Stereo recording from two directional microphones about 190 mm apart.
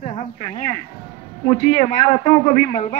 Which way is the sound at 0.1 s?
35° left (ahead or behind).